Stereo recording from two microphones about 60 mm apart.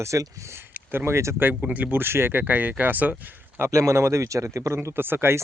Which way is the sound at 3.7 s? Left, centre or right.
Right.